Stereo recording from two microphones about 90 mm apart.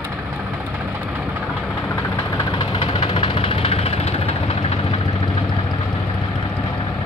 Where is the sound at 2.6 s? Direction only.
85° left.